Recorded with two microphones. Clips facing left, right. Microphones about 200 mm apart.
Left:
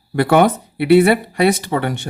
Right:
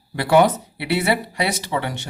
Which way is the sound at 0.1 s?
55° left (ahead or behind).